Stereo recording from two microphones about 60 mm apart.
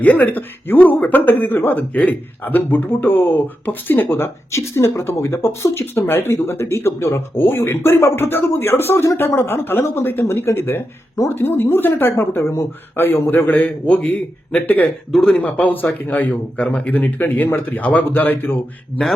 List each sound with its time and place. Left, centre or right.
0.0 s speech: left
10.2 s speech: left
13.1 s speech: left
13.8 s a man's voice: centre
14.7 s a man's voice: left
15.1 s a man's voice: centre
15.4 s a man's voice: left